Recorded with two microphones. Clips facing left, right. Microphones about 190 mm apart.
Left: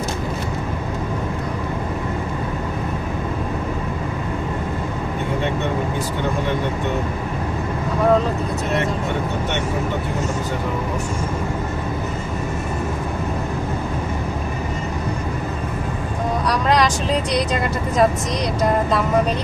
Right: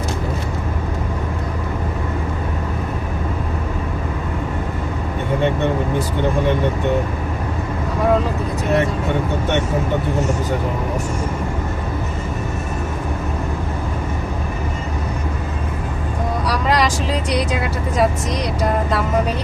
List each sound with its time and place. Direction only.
16.5 s vehicle: 5° right (ahead or behind)